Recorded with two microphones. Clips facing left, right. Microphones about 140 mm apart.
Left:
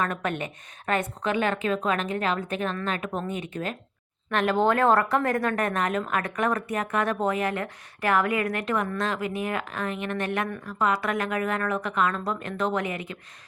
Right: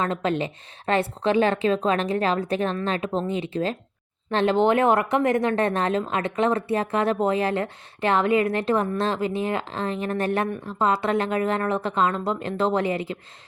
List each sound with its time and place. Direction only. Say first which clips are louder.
0.0 s a woman's voice: right 4 dB; 25° right (ahead or behind)